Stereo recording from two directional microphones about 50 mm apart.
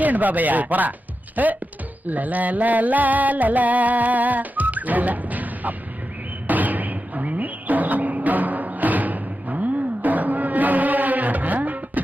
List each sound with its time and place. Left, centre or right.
0.0 s music: right